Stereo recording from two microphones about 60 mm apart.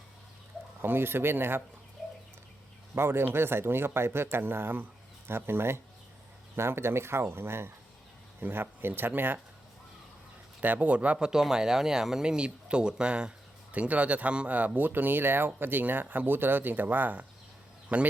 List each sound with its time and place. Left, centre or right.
0.8 s speech: right
2.9 s speech: right
10.6 s speech: right
11.3 s speech: centre
14.8 s speech: right